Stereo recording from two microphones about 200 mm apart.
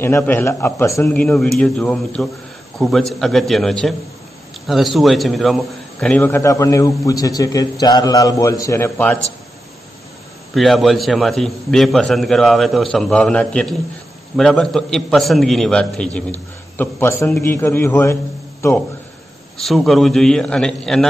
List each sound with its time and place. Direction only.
0.0 s a man's voice: 10° left (ahead or behind)
10.5 s a man's voice: centre (ahead or behind)
19.6 s a man's voice: centre (ahead or behind)